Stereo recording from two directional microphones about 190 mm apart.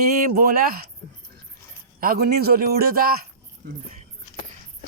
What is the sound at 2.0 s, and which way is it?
Speech, 50° right (ahead or behind).